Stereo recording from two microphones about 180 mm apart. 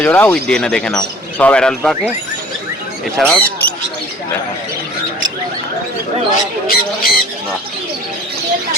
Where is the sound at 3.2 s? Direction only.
5° left (ahead or behind).